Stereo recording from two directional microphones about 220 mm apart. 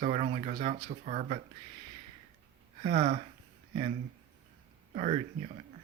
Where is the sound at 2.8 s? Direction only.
30° right (ahead or behind).